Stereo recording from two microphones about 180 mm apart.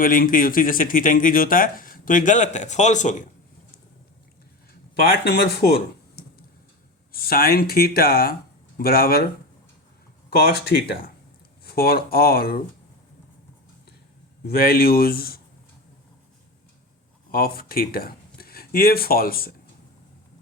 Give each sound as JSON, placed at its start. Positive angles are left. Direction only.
{"t": 0.0, "sound": "speech", "side_deg": 50}
{"t": 4.9, "sound": "speech", "side_deg": 60}
{"t": 7.1, "sound": "speech", "side_deg": 55}
{"t": 14.4, "sound": "speech", "side_deg": 55}
{"t": 17.3, "sound": "speech", "side_deg": 55}